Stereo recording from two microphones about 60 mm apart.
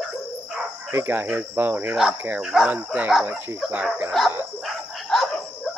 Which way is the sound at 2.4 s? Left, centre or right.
Centre.